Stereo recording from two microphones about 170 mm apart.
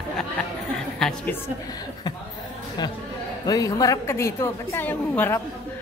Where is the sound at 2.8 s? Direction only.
25° left (ahead or behind).